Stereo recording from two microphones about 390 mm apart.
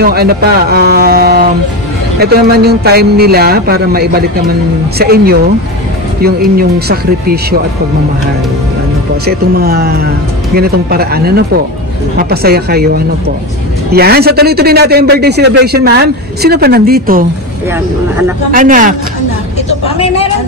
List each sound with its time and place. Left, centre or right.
0.0 s a man's voice: right
9.2 s a man's voice: right
18.5 s a man's voice: right